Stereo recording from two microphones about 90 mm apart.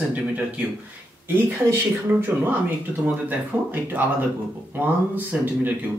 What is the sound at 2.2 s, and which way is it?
Speech, 20° right (ahead or behind).